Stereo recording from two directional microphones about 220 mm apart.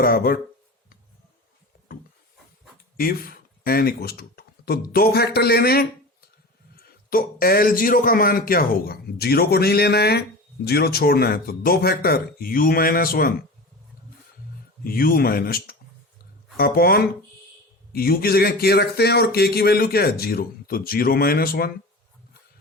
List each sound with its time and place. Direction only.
0.0 s a man's voice: 40° left (ahead or behind)
3.0 s a man's voice: 40° left (ahead or behind)
14.8 s a man's voice: 40° left (ahead or behind)